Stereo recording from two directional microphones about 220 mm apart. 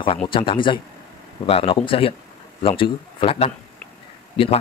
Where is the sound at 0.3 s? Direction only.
25° left (ahead or behind).